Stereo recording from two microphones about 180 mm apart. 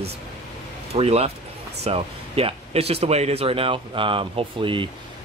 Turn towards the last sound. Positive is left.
turn(degrees=-30)  # may be behind; listen again after turning